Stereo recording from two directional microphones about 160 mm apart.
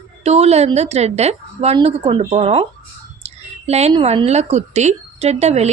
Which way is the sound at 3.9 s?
35° right (ahead or behind).